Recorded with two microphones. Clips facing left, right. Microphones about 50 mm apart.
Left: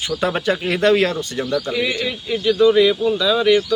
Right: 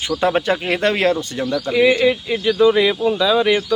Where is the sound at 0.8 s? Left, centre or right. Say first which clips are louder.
Left 3 dB; right.